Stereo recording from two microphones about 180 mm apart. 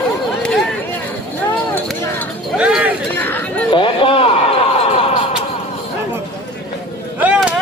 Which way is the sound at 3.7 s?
30° left (ahead or behind).